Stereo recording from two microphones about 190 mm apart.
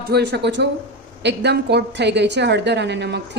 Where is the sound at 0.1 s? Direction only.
65° right (ahead or behind).